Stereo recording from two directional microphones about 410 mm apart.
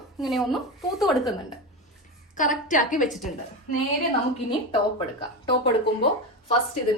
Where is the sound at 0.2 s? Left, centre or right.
Centre.